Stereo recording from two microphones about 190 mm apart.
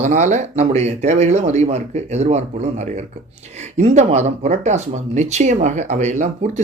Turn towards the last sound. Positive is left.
turn(degrees=-40)  # may be behind; listen again after turning